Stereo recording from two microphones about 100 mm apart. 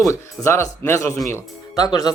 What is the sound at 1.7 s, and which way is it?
Speech, 40° left (ahead or behind).